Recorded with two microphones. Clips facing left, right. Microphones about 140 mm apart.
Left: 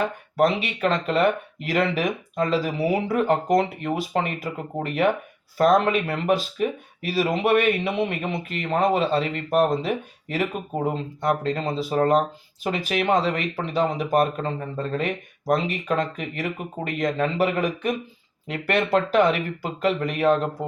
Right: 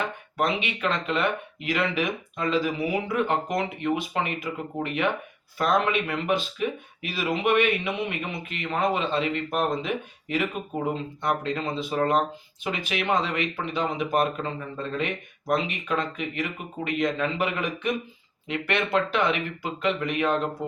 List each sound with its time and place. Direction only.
0.3 s speech: 40° left (ahead or behind)
11.4 s speech: 40° left (ahead or behind)
20.6 s speech: centre (ahead or behind)